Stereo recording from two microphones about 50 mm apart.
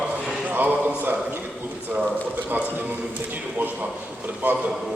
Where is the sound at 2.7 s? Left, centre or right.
Right.